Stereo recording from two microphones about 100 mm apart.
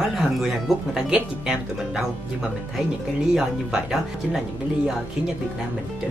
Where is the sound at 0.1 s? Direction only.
5° right (ahead or behind).